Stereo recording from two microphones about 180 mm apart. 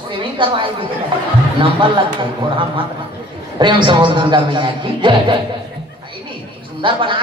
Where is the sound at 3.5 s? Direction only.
25° right (ahead or behind).